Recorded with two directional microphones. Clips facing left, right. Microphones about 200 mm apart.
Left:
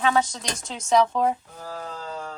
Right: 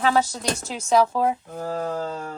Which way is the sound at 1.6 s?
45° right (ahead or behind).